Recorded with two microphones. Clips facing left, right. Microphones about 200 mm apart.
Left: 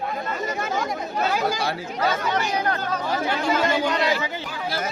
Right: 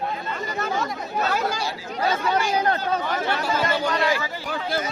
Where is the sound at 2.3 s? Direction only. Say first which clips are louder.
Right 2 dB; 30° right (ahead or behind).